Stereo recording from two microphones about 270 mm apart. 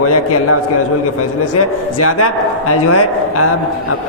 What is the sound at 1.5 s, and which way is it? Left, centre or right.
A man's voice, left.